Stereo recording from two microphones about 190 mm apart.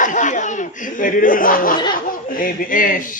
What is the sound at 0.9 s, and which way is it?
A man's voice, 45° left (ahead or behind).